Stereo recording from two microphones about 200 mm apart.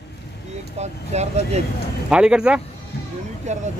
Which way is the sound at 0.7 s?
35° right (ahead or behind).